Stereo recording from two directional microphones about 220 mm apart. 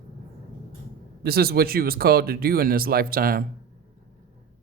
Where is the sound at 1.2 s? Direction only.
45° right (ahead or behind).